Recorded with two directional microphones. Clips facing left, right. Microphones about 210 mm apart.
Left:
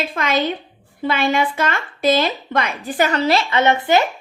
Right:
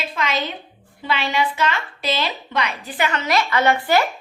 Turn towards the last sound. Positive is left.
turn(degrees=20)  # may be behind; listen again after turning